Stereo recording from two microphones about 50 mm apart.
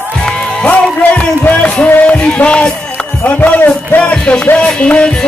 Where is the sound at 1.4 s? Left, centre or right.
Left.